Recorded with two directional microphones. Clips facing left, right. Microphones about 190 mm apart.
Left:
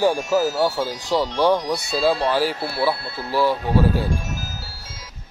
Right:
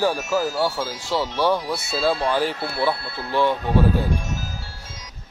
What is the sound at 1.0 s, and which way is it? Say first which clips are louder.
Speech: left 3 dB; 15° left (ahead or behind).